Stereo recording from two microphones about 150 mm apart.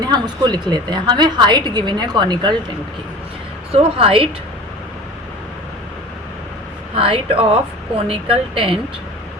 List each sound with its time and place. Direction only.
0.0 s a woman's voice: 30° right (ahead or behind)
3.7 s a woman's voice: 40° right (ahead or behind)
6.9 s a woman's voice: 35° right (ahead or behind)